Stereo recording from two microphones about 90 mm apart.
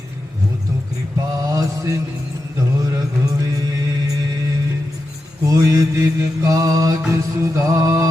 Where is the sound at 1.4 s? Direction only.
40° right (ahead or behind).